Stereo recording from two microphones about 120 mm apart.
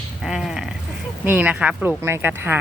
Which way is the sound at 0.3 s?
5° right (ahead or behind).